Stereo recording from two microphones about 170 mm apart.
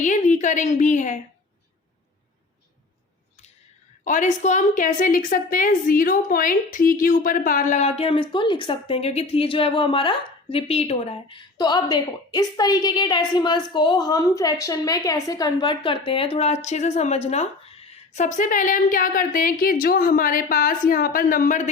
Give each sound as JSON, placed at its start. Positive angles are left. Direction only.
{"t": 0.0, "sound": "a woman's voice", "side_deg": 45}
{"t": 4.0, "sound": "a woman's voice", "side_deg": 50}